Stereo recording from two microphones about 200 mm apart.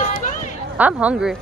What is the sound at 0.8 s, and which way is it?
Speech, 10° right (ahead or behind).